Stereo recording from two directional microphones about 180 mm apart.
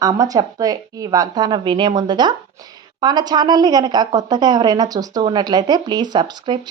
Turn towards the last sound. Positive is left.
turn(degrees=-25)  # may be behind; listen again after turning